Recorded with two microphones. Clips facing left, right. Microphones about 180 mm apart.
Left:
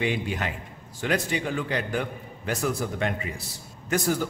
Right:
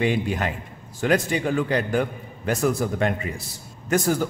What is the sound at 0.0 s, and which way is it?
A man's voice, 45° right (ahead or behind).